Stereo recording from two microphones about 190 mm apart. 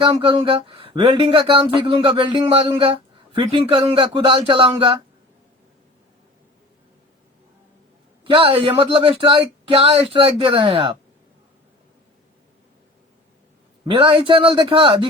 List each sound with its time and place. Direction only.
0.0 s speech: 30° right (ahead or behind)
8.3 s speech: 30° right (ahead or behind)
13.8 s speech: 30° right (ahead or behind)